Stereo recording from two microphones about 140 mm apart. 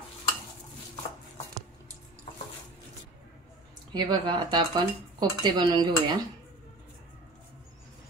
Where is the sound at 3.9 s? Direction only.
30° right (ahead or behind).